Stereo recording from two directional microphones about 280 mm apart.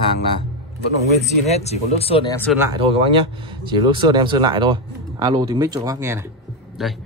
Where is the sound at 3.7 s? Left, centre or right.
Centre.